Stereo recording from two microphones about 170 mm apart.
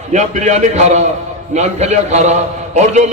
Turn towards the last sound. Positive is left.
turn(degrees=-40)  # may be behind; listen again after turning